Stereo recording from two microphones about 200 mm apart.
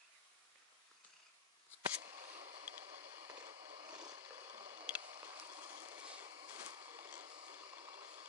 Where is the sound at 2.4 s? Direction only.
35° right (ahead or behind).